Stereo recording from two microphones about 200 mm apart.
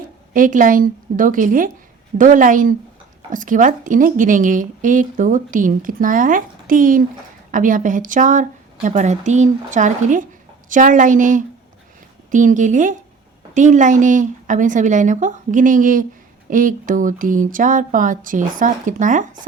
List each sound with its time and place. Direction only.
0.3 s a woman's voice: 40° right (ahead or behind)